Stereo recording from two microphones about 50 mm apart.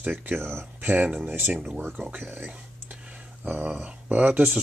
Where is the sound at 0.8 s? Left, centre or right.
Right.